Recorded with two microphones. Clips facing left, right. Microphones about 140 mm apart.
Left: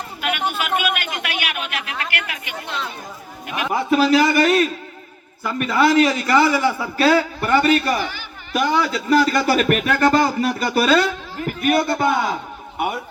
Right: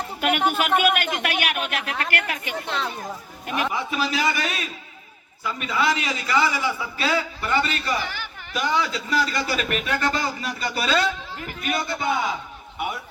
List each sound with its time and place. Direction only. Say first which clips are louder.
0.2 s speech: right 2 dB; 45° right (ahead or behind)
3.7 s a man's voice: left 10 dB; 50° left (ahead or behind)